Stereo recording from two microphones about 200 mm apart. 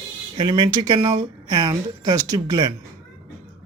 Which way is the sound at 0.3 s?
25° right (ahead or behind).